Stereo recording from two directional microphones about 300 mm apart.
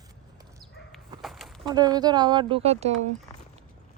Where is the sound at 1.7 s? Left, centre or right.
Centre.